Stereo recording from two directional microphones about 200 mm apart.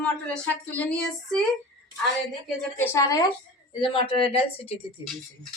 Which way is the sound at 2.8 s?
15° left (ahead or behind).